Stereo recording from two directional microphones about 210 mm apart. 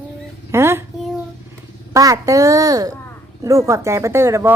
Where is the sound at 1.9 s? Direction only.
15° right (ahead or behind).